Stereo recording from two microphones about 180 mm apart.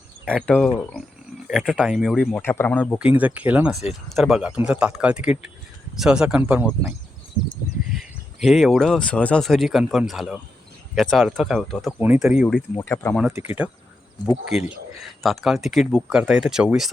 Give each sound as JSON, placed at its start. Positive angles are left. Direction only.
{"t": 0.3, "sound": "speech", "side_deg": 5}
{"t": 3.2, "sound": "speech", "side_deg": -10}
{"t": 7.9, "sound": "speech", "side_deg": 0}
{"t": 11.9, "sound": "speech", "side_deg": -10}
{"t": 12.7, "sound": "speech", "side_deg": 15}
{"t": 13.4, "sound": "speech", "side_deg": 35}
{"t": 15.2, "sound": "speech", "side_deg": 0}